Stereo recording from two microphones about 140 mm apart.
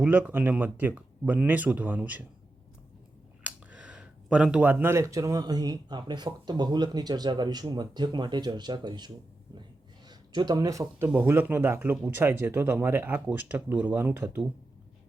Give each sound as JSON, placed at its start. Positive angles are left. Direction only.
{"t": 0.0, "sound": "speech", "side_deg": -10}
{"t": 3.4, "sound": "speech", "side_deg": -10}